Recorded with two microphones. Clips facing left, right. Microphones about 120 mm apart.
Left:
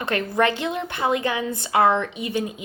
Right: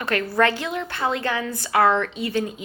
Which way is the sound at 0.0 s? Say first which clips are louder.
Right 1 dB; 20° left (ahead or behind).